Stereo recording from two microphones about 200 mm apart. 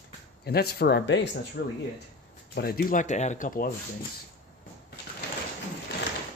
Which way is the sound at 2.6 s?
50° left (ahead or behind).